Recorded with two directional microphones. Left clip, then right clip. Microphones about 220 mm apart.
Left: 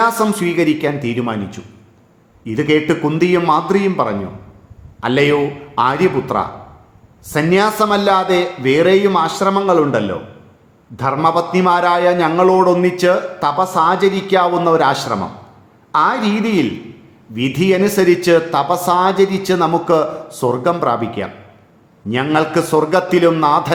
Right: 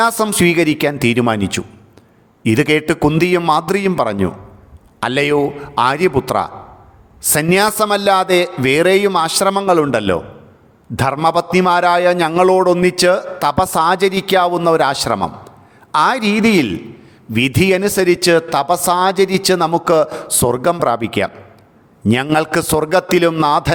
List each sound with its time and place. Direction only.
0.0 s a man's voice: 45° right (ahead or behind)